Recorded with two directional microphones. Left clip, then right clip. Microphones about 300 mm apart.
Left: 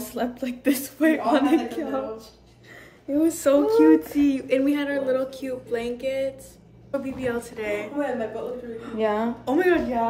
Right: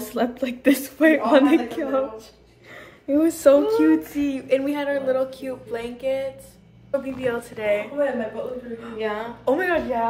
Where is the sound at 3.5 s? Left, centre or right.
Centre.